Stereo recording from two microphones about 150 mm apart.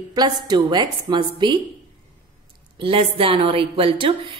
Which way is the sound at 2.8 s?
35° right (ahead or behind).